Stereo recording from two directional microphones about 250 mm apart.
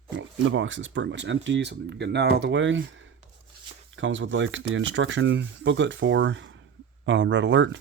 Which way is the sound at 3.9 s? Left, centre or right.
Right.